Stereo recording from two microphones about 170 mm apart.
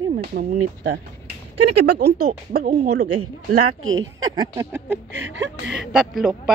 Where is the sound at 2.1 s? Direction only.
60° right (ahead or behind).